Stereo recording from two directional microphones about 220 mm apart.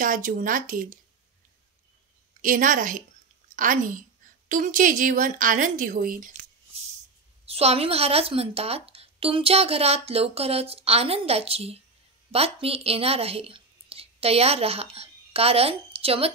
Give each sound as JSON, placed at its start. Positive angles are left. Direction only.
{"t": 0.0, "sound": "a woman's voice", "side_deg": -40}
{"t": 2.4, "sound": "a woman's voice", "side_deg": -35}
{"t": 7.4, "sound": "speech", "side_deg": -25}